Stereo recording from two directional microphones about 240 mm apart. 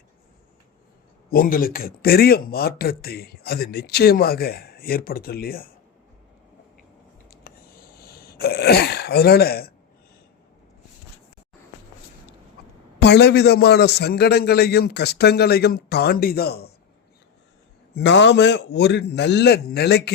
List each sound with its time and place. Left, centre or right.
1.3 s speech: left
7.5 s a sound: left
7.9 s throat clearing: left
13.0 s a man's voice: left
17.9 s a man's voice: left